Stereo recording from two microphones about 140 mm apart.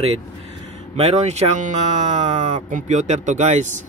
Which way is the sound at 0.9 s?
50° right (ahead or behind).